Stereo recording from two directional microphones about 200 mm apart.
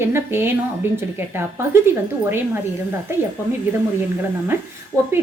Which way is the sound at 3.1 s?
10° right (ahead or behind).